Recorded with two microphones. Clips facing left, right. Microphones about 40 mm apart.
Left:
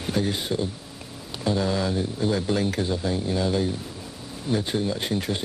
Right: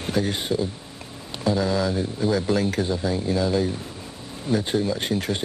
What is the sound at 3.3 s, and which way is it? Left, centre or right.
Speech, centre.